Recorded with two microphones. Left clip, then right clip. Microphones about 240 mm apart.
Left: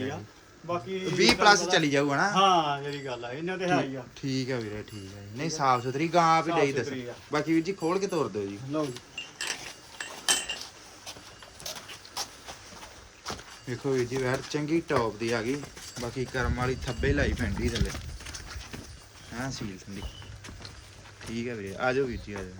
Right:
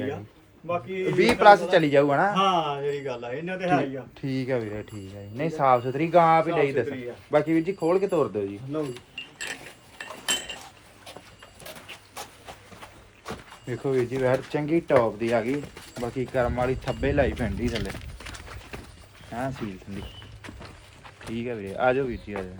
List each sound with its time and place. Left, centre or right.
1.1 s speech: centre
2.3 s speech: centre
10.0 s a sound: centre
13.7 s speech: centre
19.3 s speech: centre
21.2 s speech: centre